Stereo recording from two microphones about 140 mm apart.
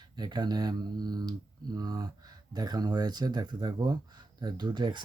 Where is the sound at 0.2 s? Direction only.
30° right (ahead or behind).